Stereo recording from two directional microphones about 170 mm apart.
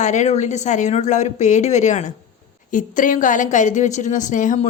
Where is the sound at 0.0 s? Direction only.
45° left (ahead or behind).